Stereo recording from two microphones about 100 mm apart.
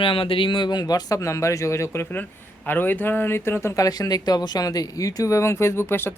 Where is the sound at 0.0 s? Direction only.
65° left (ahead or behind).